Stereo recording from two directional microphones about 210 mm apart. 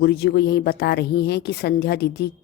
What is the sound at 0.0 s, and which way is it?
Speech, 50° left (ahead or behind).